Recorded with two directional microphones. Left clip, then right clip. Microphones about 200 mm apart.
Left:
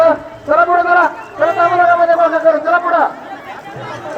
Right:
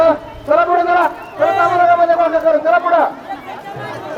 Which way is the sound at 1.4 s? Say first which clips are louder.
Left 1 dB; 20° right (ahead or behind).